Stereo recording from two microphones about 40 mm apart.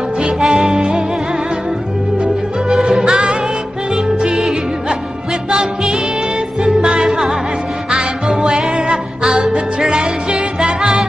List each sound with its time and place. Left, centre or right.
0.4 s music: centre
3.0 s music: centre
4.4 s music: centre